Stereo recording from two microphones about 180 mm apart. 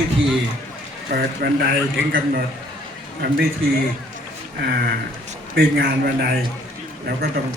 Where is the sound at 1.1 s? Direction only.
55° right (ahead or behind).